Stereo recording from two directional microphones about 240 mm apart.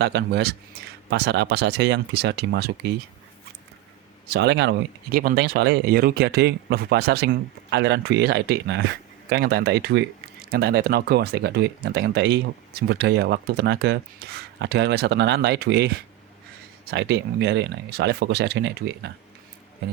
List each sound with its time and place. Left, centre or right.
0.0 s speech: right
4.3 s speech: right
16.9 s speech: right